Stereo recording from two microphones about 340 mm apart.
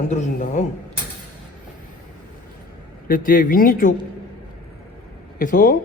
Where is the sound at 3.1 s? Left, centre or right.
Left.